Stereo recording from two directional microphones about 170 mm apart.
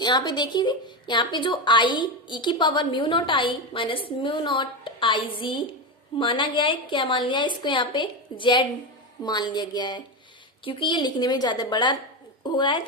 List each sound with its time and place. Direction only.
0.0 s a woman's voice: 25° left (ahead or behind)